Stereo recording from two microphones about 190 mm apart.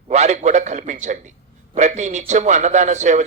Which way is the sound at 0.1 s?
35° right (ahead or behind).